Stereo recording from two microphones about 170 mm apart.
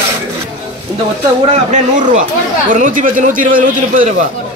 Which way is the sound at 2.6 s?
50° right (ahead or behind).